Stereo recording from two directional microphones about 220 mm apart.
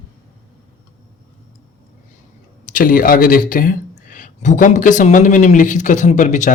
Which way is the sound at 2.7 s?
40° left (ahead or behind).